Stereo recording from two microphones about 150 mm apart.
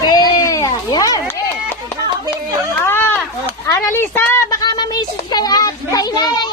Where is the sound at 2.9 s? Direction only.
15° left (ahead or behind).